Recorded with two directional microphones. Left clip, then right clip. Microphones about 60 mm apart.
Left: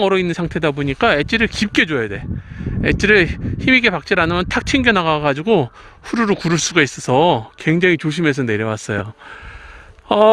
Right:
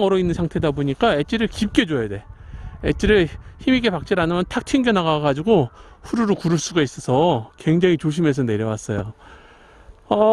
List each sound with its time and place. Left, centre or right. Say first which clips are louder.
0.0 s speech: left 3 dB; right
6.6 s speech: left 6 dB; right
7.6 s speech: left 2 dB; right
7.9 s speech: left 3 dB; right
8.4 s speech: left 4 dB; right
10.1 s speech: left 5 dB; centre